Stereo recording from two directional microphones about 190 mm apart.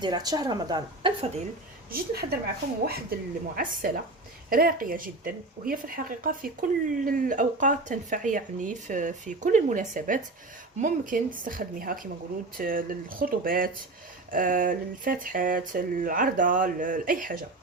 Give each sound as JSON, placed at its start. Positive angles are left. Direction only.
{"t": 0.0, "sound": "a woman's voice", "side_deg": -20}
{"t": 1.9, "sound": "a woman's voice", "side_deg": -55}